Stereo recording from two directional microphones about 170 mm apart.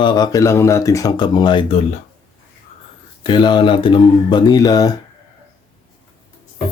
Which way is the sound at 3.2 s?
25° left (ahead or behind).